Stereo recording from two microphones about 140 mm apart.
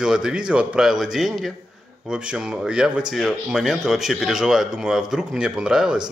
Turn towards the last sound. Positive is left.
turn(degrees=-5)  # may be behind; listen again after turning